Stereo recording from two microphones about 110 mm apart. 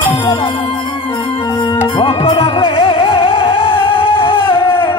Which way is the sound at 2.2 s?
55° left (ahead or behind).